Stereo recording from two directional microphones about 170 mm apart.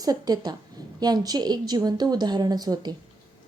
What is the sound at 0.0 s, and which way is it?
A woman's voice, 20° right (ahead or behind).